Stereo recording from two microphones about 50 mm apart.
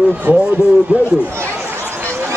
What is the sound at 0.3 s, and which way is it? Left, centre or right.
Speech, right.